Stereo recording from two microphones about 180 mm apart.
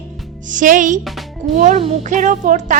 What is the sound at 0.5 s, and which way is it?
Music, 45° right (ahead or behind).